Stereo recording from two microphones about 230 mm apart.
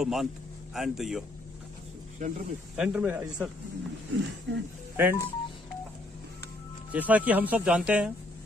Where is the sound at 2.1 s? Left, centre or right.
Right.